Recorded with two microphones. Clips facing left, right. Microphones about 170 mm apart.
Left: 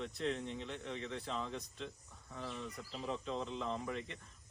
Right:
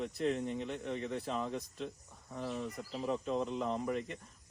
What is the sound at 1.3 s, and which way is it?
Speech, 10° right (ahead or behind).